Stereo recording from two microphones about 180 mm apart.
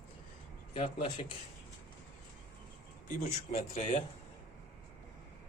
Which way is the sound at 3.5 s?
40° left (ahead or behind).